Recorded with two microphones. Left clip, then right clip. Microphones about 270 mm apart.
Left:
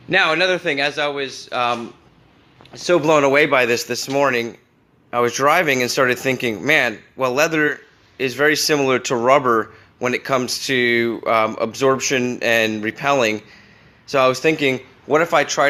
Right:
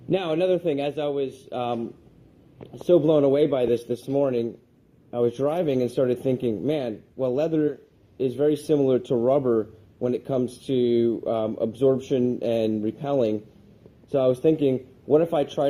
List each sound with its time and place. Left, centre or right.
0.1 s a man's voice: left
2.8 s a man's voice: left